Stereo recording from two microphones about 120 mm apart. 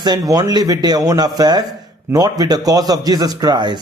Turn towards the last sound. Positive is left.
turn(degrees=-35)  # may be behind; listen again after turning